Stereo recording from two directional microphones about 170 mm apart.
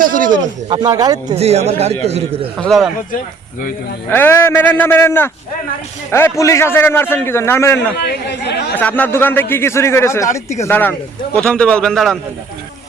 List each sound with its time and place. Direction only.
0.0 s a man's voice: 50° right (ahead or behind)
0.7 s speech: 25° right (ahead or behind)
1.4 s a man's voice: 40° right (ahead or behind)
2.6 s a man's voice: centre (ahead or behind)
4.1 s a man's voice: 15° left (ahead or behind)
7.9 s speech: 70° left (ahead or behind)
8.7 s a man's voice: 10° left (ahead or behind)